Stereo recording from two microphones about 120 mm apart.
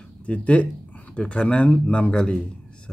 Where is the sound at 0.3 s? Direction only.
10° left (ahead or behind).